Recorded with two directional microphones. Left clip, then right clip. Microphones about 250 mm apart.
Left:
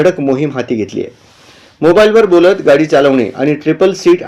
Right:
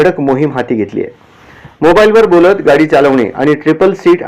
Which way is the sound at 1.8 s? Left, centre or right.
Centre.